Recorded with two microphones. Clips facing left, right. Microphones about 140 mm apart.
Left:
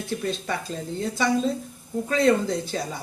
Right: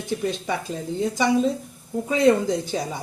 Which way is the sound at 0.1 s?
15° right (ahead or behind).